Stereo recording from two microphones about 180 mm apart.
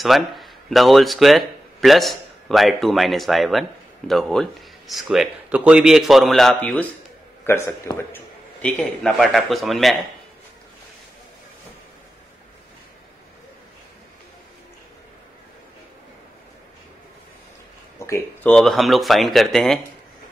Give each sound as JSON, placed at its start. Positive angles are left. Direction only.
{"t": 0.0, "sound": "speech", "side_deg": 0}
{"t": 17.9, "sound": "a sound", "side_deg": 15}
{"t": 18.5, "sound": "speech", "side_deg": 0}